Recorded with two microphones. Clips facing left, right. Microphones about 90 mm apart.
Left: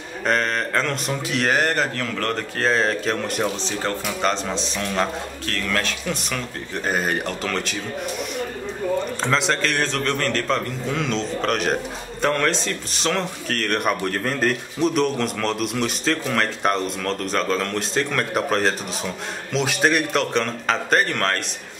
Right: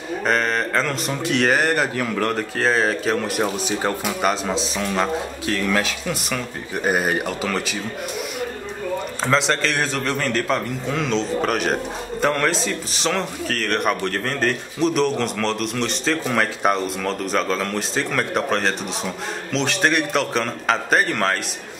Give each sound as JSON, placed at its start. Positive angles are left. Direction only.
{"t": 0.2, "sound": "a man's voice", "side_deg": 0}
{"t": 9.2, "sound": "a man's voice", "side_deg": 0}